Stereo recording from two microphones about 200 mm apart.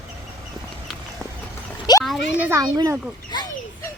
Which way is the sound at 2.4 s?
15° right (ahead or behind).